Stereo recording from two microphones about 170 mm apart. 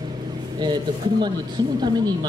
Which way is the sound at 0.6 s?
25° right (ahead or behind).